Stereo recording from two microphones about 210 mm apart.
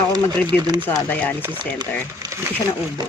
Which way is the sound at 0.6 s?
20° right (ahead or behind).